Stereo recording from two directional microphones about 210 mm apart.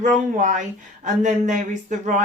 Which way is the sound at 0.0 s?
35° right (ahead or behind).